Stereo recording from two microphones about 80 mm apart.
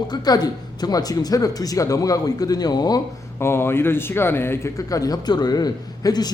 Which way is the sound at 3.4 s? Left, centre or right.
Left.